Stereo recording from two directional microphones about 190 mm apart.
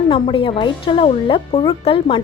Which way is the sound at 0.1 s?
25° left (ahead or behind).